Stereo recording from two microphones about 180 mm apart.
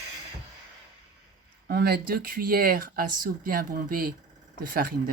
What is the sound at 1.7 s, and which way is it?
Speech, 60° right (ahead or behind).